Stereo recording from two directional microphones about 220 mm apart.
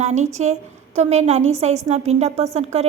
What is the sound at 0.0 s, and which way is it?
A woman's voice, 30° right (ahead or behind).